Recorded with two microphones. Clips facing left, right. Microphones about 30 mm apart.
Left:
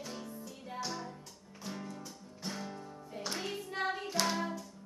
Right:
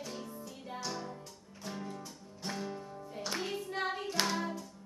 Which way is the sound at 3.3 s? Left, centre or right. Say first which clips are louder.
Right 2 dB; centre.